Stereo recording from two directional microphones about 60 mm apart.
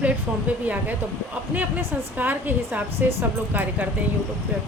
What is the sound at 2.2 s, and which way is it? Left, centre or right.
Speech, right.